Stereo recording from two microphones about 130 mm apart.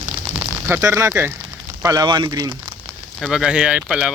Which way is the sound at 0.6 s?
20° right (ahead or behind).